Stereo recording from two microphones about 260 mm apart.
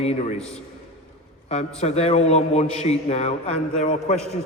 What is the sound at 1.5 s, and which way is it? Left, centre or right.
A man's voice, left.